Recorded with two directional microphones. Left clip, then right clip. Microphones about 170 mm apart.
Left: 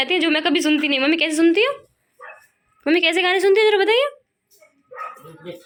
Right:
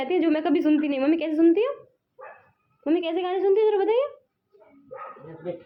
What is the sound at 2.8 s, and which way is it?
Speech, 25° left (ahead or behind).